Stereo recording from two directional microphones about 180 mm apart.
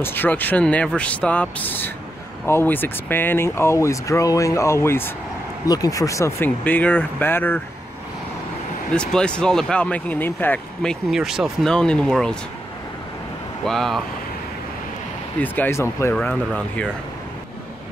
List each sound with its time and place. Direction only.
0.0 s speech: 10° left (ahead or behind)
8.9 s speech: 5° left (ahead or behind)
13.7 s speech: centre (ahead or behind)
15.4 s speech: 10° left (ahead or behind)